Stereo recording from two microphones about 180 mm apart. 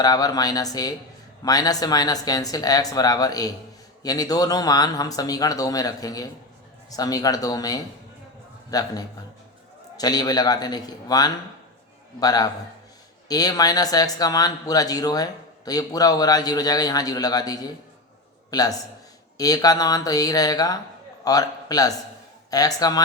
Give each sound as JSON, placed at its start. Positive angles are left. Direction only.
{"t": 0.0, "sound": "speech", "side_deg": 20}
{"t": 10.0, "sound": "a man's voice", "side_deg": 20}